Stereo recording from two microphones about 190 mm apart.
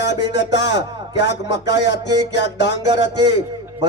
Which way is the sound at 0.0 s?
65° left (ahead or behind).